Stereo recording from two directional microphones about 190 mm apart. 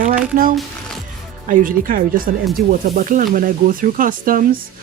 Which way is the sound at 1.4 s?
45° right (ahead or behind).